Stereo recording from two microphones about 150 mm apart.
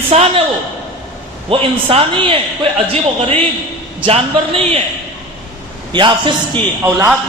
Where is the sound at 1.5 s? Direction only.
40° right (ahead or behind).